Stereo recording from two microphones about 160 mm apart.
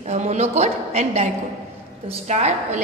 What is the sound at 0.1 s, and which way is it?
A woman's voice, 45° right (ahead or behind).